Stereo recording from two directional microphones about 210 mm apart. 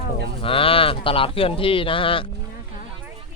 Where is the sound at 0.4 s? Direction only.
25° left (ahead or behind).